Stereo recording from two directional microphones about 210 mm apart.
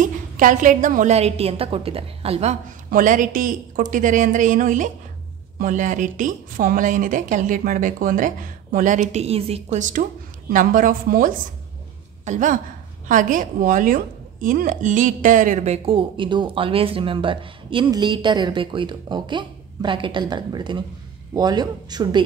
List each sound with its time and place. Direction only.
0.0 s speech: 40° right (ahead or behind)
2.9 s a woman's voice: 40° right (ahead or behind); by 22.2 s 20° right (ahead or behind)